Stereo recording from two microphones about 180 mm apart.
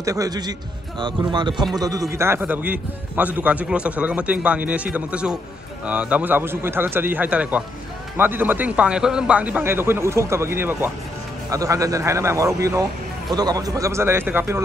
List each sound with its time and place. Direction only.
0.0 s a man's voice: 20° right (ahead or behind)